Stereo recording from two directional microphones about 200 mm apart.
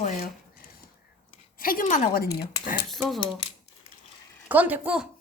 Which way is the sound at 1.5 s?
45° left (ahead or behind).